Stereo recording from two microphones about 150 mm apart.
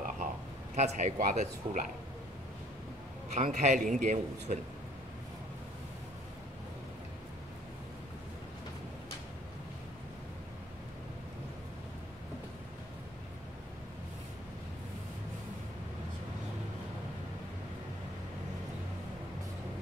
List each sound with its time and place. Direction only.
0.7 s a man's voice: 50° right (ahead or behind)
3.3 s a man's voice: 55° right (ahead or behind)